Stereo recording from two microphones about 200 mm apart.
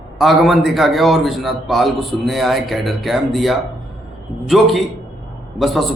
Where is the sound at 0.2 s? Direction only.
Centre (ahead or behind).